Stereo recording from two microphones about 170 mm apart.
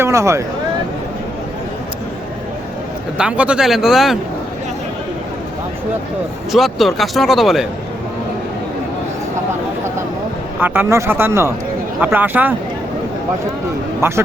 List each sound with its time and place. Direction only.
0.0 s speech: 15° right (ahead or behind)
3.2 s speech: 5° right (ahead or behind)
6.5 s speech: centre (ahead or behind)
10.6 s speech: 15° right (ahead or behind)
14.0 s speech: 15° right (ahead or behind)